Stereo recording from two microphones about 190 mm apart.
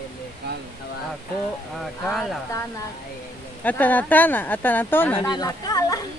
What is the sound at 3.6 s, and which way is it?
Speech, 10° left (ahead or behind).